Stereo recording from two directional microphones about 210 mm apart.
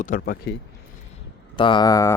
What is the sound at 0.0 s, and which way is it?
Speech, 40° left (ahead or behind).